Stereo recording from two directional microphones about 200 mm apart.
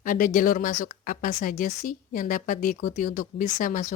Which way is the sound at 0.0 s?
45° left (ahead or behind).